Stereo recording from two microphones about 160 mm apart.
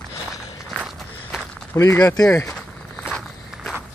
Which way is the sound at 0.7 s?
Centre (ahead or behind).